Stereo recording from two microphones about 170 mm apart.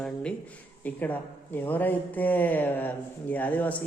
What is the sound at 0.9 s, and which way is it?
A woman's voice, 10° left (ahead or behind).